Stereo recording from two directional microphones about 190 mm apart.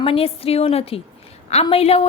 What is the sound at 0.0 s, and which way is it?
A woman's voice, 30° left (ahead or behind).